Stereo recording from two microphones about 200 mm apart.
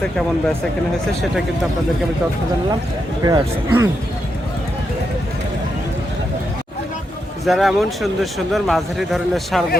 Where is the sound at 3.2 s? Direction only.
15° right (ahead or behind).